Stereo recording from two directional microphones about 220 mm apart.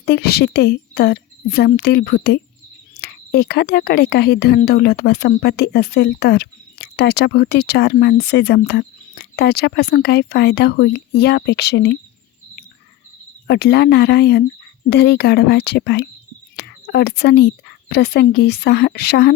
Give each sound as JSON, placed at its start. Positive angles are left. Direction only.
{"t": 0.0, "sound": "speech", "side_deg": 45}
{"t": 13.5, "sound": "speech", "side_deg": 50}